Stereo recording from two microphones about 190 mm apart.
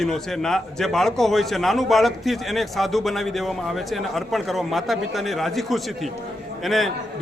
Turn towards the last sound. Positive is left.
turn(degrees=0)  # may be behind; listen again after turning